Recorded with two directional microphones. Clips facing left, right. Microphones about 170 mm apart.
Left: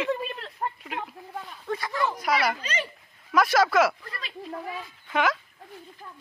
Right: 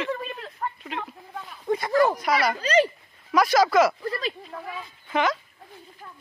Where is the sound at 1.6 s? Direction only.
20° right (ahead or behind).